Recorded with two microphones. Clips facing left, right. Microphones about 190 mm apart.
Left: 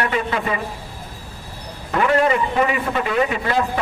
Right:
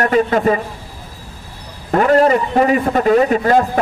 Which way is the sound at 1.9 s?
40° right (ahead or behind).